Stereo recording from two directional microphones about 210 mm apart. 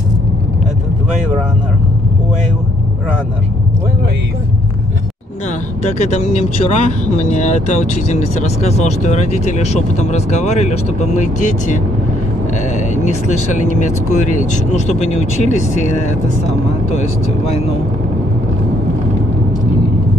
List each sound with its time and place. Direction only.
5.8 s speech: 30° left (ahead or behind)